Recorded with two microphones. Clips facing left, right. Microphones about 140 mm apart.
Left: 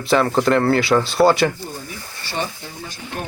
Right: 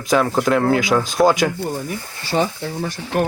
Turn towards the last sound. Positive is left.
turn(degrees=-75)  # may be behind; listen again after turning